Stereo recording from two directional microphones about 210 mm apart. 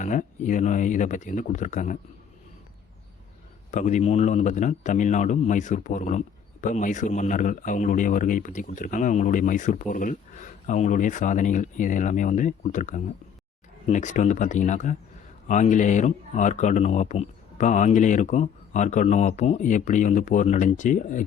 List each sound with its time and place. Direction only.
0.0 s a man's voice: 40° left (ahead or behind)
3.7 s a man's voice: 35° left (ahead or behind)